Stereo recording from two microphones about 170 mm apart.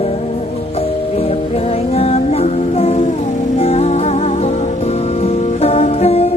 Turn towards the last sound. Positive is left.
turn(degrees=35)  # may be behind; listen again after turning